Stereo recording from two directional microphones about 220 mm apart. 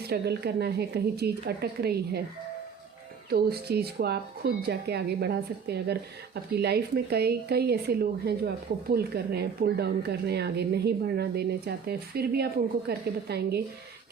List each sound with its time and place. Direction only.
0.0 s speech: 45° right (ahead or behind)
3.2 s speech: 45° right (ahead or behind)